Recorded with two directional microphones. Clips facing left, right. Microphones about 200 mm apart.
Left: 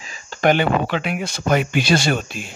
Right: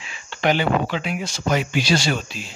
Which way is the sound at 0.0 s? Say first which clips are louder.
Left 4 dB; 40° left (ahead or behind).